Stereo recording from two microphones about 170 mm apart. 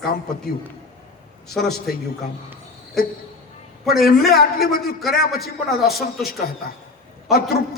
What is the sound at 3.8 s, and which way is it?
Speech, centre (ahead or behind).